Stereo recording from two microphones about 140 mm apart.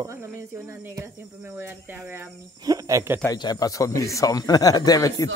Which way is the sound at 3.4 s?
25° left (ahead or behind).